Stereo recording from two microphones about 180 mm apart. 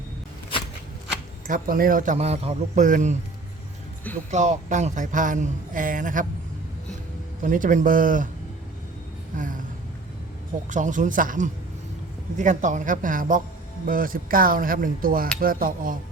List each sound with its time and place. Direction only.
1.5 s speech: 50° right (ahead or behind)
4.3 s speech: 40° right (ahead or behind)
7.4 s speech: 45° right (ahead or behind)
9.3 s speech: 45° right (ahead or behind)
10.7 s speech: 45° right (ahead or behind)